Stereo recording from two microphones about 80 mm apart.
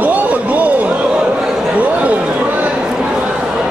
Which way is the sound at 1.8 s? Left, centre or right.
Centre.